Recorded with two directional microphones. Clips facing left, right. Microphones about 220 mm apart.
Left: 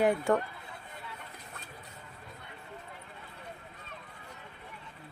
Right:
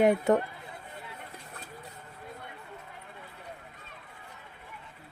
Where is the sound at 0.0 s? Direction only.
20° right (ahead or behind).